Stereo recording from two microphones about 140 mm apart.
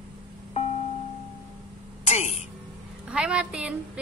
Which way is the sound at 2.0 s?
50° left (ahead or behind).